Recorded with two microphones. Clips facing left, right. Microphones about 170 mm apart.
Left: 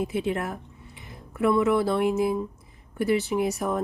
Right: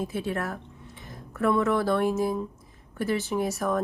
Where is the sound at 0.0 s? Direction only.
15° left (ahead or behind).